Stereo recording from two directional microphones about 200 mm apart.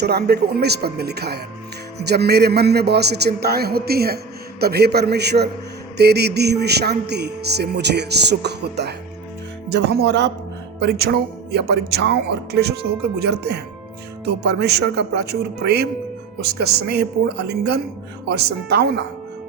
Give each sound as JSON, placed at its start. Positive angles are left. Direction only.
{"t": 0.0, "sound": "speech", "side_deg": -55}